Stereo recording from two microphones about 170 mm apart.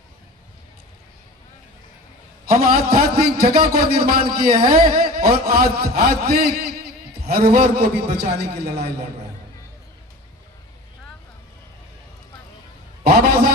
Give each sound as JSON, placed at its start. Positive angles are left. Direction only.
{"t": 2.5, "sound": "a man's voice", "side_deg": -60}